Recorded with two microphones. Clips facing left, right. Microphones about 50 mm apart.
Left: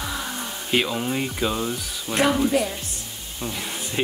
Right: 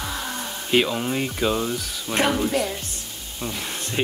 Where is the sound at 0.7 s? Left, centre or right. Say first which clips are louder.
Right 2 dB; centre.